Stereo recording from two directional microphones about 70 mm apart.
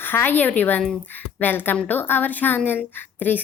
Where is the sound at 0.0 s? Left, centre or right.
Left.